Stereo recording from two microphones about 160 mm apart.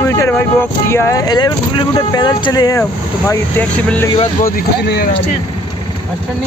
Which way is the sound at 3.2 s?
10° left (ahead or behind).